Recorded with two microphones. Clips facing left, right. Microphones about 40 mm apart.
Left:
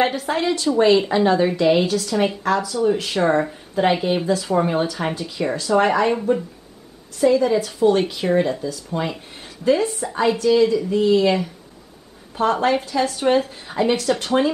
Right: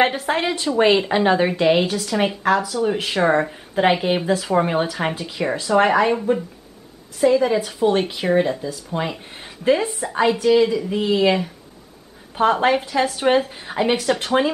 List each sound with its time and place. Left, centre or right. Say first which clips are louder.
0.0 s a woman's voice: right 1 dB; right